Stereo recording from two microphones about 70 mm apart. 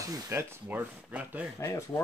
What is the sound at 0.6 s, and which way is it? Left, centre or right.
Speech, right.